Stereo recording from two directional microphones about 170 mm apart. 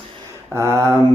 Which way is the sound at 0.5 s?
15° right (ahead or behind).